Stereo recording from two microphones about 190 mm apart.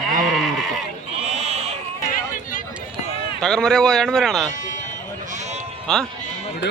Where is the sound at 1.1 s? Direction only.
35° right (ahead or behind).